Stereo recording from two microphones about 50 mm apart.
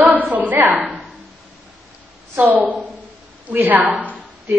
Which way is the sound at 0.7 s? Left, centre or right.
Centre.